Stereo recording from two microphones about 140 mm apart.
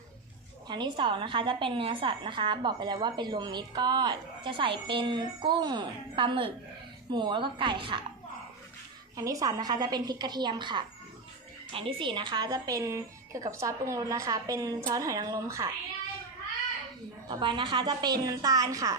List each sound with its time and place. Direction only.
0.7 s a woman's voice: 35° right (ahead or behind)
9.1 s a woman's voice: 25° right (ahead or behind)
17.2 s a woman's voice: 35° right (ahead or behind)